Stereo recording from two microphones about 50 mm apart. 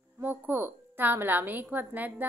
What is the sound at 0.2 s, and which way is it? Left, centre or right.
A woman's voice, right.